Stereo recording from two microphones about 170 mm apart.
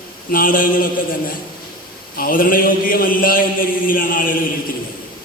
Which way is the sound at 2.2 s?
55° left (ahead or behind).